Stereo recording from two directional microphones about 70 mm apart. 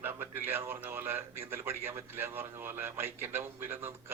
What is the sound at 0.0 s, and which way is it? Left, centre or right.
A man's voice, right.